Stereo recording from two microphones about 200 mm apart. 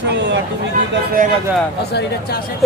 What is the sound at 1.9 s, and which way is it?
Speech, 50° left (ahead or behind).